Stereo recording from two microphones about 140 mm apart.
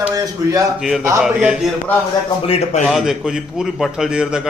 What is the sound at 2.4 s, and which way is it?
Speech, 45° left (ahead or behind).